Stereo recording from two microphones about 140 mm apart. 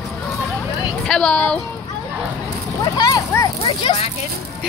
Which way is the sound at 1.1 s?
5° left (ahead or behind).